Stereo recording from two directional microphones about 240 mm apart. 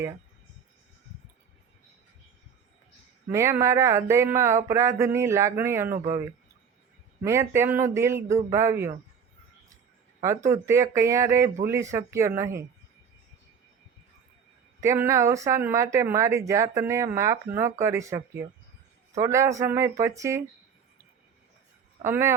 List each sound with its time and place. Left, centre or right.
3.2 s speech: centre
5.9 s speech: right
7.2 s speech: centre
10.2 s speech: centre
14.8 s speech: centre
22.0 s speech: centre